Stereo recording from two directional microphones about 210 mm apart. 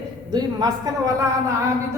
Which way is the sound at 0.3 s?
20° right (ahead or behind).